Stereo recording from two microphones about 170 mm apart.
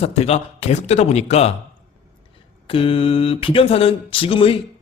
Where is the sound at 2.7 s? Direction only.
30° left (ahead or behind).